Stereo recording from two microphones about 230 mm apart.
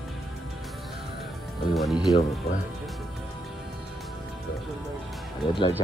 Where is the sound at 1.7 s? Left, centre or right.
Centre.